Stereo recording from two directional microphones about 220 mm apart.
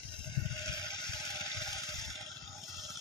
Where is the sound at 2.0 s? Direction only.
Centre (ahead or behind).